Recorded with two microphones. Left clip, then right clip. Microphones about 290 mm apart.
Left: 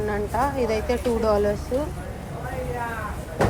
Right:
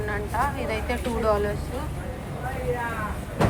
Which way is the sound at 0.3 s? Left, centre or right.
Left.